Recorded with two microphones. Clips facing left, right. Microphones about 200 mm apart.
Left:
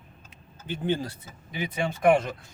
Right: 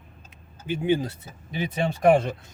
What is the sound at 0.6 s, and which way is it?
Speech, 10° right (ahead or behind).